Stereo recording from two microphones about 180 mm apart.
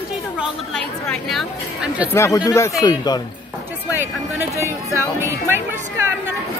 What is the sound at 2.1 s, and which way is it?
Speech, 15° left (ahead or behind).